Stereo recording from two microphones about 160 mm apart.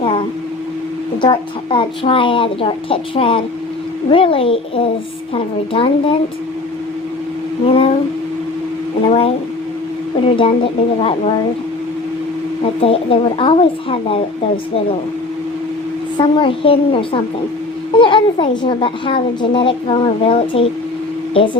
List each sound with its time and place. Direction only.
0.0 s a sound: 35° left (ahead or behind)
1.2 s speech: 30° left (ahead or behind)
7.7 s speech: 35° left (ahead or behind)
9.0 s speech: 35° left (ahead or behind)
12.8 s speech: 35° left (ahead or behind)
16.1 s speech: 30° left (ahead or behind)